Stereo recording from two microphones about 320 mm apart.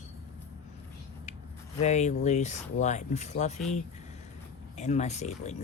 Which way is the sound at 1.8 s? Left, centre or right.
Left.